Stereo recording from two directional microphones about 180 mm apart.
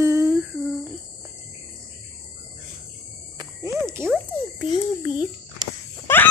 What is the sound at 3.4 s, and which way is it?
Cricket, 15° right (ahead or behind).